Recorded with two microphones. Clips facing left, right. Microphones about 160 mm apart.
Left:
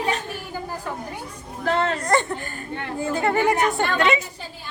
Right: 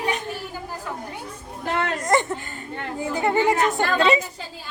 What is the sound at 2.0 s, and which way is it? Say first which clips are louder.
A woman's voice: even; 20° right (ahead or behind).